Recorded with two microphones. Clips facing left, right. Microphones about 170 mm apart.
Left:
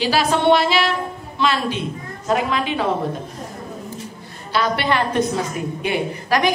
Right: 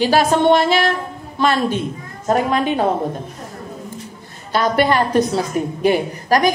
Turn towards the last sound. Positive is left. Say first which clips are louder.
# right 3 dB
turn(degrees=-40)  # may be behind; listen again after turning